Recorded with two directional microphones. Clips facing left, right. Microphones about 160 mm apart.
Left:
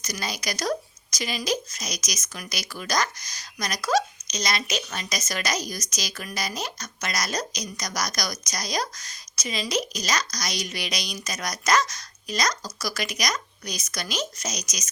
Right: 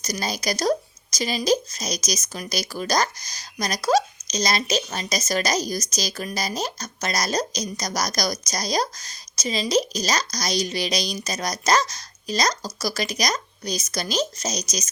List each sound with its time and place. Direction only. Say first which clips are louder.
0.0 s speech: right 5 dB; 35° right (ahead or behind)